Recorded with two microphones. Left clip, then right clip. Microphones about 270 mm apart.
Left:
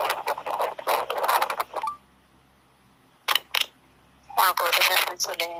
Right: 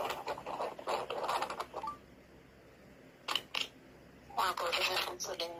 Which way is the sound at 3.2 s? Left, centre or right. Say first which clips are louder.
Left 12 dB; left.